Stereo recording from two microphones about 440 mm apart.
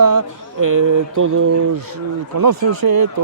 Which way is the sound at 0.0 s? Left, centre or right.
Right.